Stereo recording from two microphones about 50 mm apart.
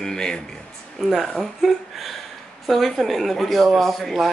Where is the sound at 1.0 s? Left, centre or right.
Centre.